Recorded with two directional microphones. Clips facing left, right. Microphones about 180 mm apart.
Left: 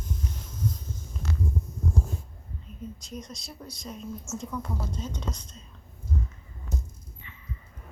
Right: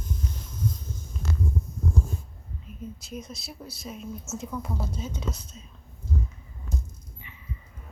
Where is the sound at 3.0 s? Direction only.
5° right (ahead or behind).